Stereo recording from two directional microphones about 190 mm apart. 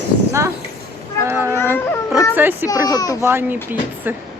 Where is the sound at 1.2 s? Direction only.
15° right (ahead or behind).